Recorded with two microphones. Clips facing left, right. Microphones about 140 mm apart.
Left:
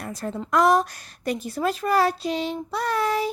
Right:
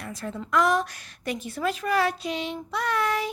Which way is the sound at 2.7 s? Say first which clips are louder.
Left 2 dB; 35° left (ahead or behind).